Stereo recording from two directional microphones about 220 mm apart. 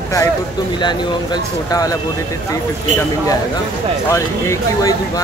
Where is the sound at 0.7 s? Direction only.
20° left (ahead or behind).